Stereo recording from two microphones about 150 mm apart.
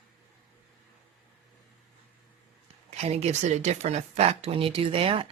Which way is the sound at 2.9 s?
45° right (ahead or behind).